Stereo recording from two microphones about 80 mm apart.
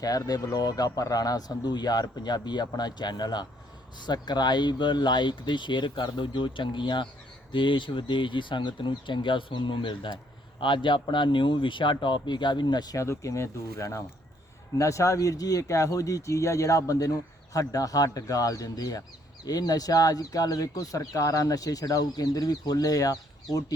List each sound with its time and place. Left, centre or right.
0.0 s speech: left
13.0 s speech: left